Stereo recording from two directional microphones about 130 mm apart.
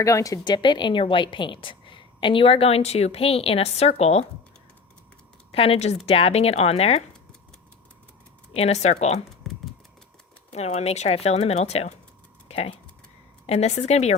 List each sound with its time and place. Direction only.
0.0 s a woman's voice: 25° left (ahead or behind); by 4.3 s 55° left (ahead or behind)
5.5 s a woman's voice: 45° left (ahead or behind)
8.5 s speech: 55° left (ahead or behind)
9.5 s a sound: centre (ahead or behind)
10.5 s speech: 55° left (ahead or behind)
12.5 s a sound: 50° left (ahead or behind)
13.5 s speech: 55° left (ahead or behind)